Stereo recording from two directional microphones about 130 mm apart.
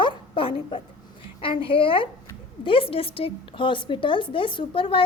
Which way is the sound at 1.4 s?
40° left (ahead or behind).